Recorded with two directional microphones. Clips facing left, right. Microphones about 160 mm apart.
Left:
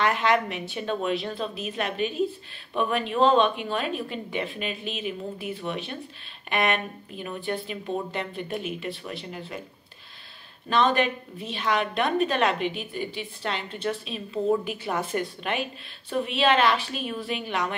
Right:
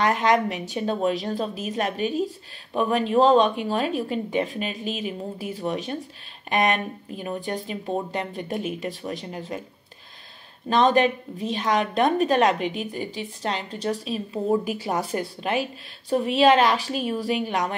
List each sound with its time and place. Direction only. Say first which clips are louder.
0.0 s a woman's voice: right 3 dB; 40° right (ahead or behind)
10.7 s a woman's voice: right 4 dB; 40° right (ahead or behind)